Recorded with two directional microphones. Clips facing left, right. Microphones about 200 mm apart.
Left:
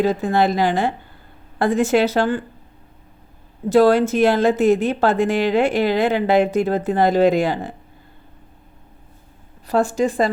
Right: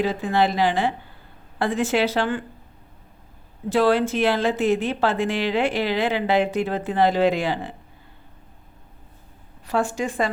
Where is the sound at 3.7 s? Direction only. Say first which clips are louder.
Left 5 dB; 40° left (ahead or behind).